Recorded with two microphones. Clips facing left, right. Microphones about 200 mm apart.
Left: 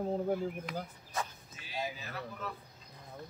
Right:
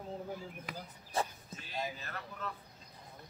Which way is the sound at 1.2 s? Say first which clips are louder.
Right 3 dB; 30° right (ahead or behind).